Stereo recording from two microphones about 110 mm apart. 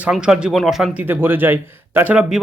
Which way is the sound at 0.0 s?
5° right (ahead or behind).